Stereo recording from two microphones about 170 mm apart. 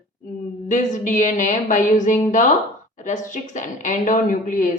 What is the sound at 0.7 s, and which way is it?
Speech, 45° left (ahead or behind).